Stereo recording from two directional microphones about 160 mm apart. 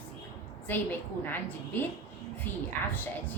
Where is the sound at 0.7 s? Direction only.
10° left (ahead or behind).